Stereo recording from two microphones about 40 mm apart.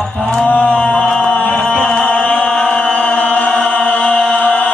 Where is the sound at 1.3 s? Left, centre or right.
Left.